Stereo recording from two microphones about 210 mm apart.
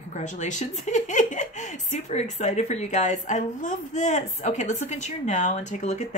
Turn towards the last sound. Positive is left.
turn(degrees=35)  # may be behind; listen again after turning